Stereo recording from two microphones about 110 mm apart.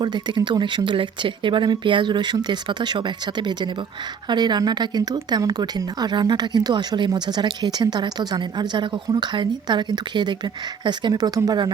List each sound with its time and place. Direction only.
0.0 s speech: 40° right (ahead or behind)